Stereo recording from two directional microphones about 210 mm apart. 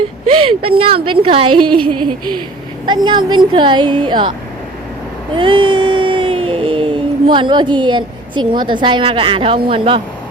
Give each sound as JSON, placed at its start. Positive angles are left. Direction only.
{"t": 0.3, "sound": "speech", "side_deg": -90}
{"t": 1.0, "sound": "a woman's voice", "side_deg": -25}
{"t": 5.3, "sound": "a sound", "side_deg": -25}